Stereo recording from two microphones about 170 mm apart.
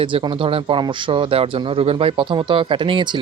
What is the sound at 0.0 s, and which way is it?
Speech, 30° right (ahead or behind).